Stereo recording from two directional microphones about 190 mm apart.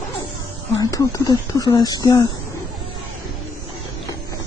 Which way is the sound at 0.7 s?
20° left (ahead or behind).